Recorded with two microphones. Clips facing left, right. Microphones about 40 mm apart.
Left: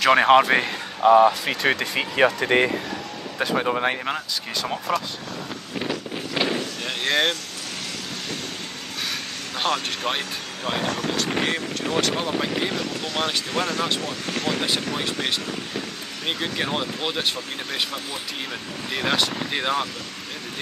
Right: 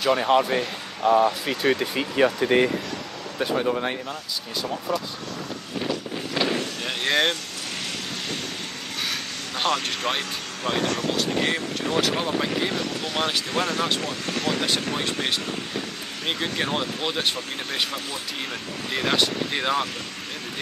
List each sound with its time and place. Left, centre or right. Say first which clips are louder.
0.0 s speech: left 5 dB; left
5.8 s a sound: even; centre
6.5 s vehicle: even; centre
9.6 s speech: even; centre
18.9 s speech: even; centre